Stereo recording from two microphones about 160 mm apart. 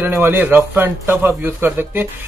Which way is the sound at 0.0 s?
15° right (ahead or behind).